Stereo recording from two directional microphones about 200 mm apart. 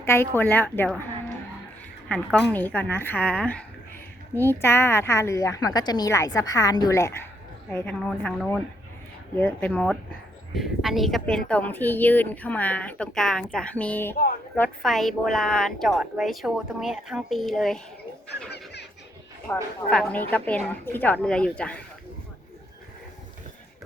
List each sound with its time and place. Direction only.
0.0 s speech: 10° left (ahead or behind)
2.0 s a woman's voice: 5° left (ahead or behind)
18.5 s a sound: 55° left (ahead or behind)
19.5 s a woman's voice: 15° left (ahead or behind)